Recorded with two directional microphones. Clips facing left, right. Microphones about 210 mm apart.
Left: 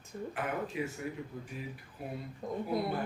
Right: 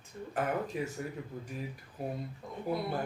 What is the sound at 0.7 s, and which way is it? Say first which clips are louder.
Speech: even; 40° right (ahead or behind).